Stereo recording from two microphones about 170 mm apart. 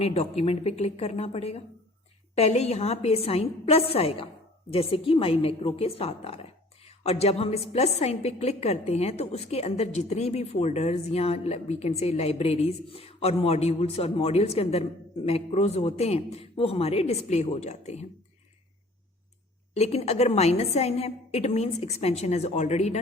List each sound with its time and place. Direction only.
0.0 s a woman's voice: 40° left (ahead or behind)
19.7 s a woman's voice: 40° left (ahead or behind)